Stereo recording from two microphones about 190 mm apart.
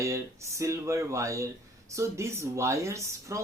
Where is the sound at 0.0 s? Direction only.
15° right (ahead or behind).